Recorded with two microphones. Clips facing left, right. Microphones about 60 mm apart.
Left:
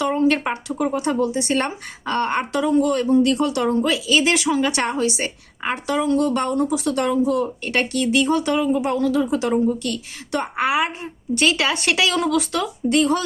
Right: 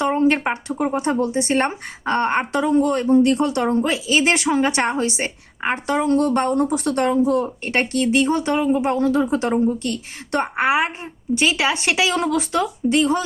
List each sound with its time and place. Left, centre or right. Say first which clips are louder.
0.0 s a woman's voice: right 1 dB; right
11.3 s speech: even; centre